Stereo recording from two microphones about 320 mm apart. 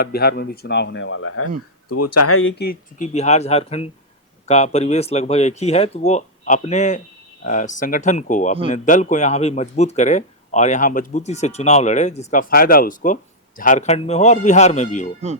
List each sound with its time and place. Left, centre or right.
0.0 s speech: left
1.9 s speech: left